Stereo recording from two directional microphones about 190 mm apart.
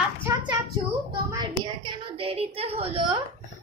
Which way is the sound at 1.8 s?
30° right (ahead or behind).